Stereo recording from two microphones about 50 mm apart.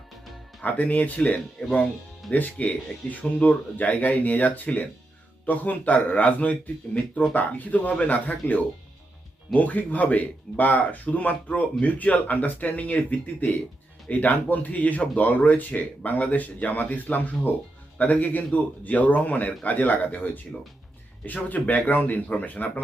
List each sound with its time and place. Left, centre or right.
0.6 s speech: left